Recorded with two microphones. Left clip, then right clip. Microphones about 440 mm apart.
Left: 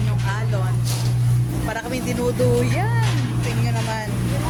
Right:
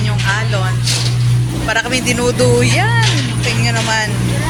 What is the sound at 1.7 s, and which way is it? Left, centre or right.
Speech, left.